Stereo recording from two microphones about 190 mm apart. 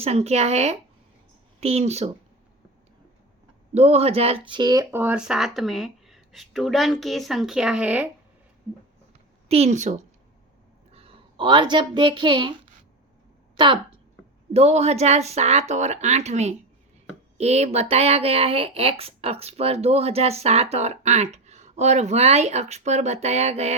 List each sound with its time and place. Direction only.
0.0 s speech: 35° right (ahead or behind)
3.8 s speech: 35° right (ahead or behind); by 8.0 s 5° right (ahead or behind)
9.5 s a woman's voice: 35° right (ahead or behind)
14.5 s speech: 35° right (ahead or behind)